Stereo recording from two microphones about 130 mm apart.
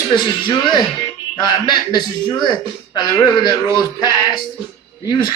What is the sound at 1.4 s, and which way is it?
Speech, 35° left (ahead or behind).